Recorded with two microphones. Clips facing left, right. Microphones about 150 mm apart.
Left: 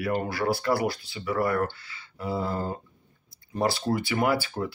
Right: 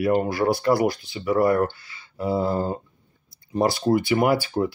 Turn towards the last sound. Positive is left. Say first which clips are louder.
# right 5 dB
turn(degrees=-30)  # may be behind; listen again after turning